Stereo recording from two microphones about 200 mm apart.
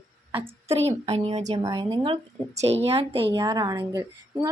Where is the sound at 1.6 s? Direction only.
20° right (ahead or behind).